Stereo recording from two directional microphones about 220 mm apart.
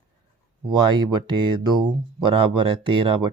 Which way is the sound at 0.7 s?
20° right (ahead or behind).